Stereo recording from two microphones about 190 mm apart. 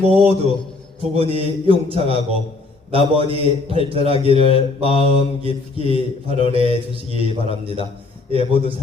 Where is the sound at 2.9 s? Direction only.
30° right (ahead or behind).